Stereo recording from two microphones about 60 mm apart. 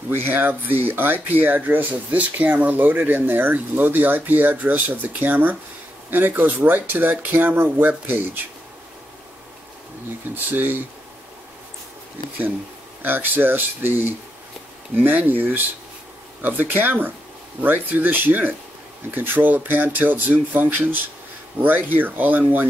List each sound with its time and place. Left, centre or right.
0.1 s speech: right
10.3 s speech: right
13.0 s speech: right